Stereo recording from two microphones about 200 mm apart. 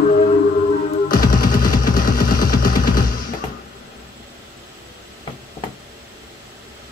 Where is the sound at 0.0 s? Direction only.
40° left (ahead or behind).